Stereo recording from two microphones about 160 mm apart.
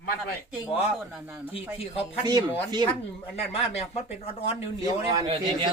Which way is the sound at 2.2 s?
25° right (ahead or behind).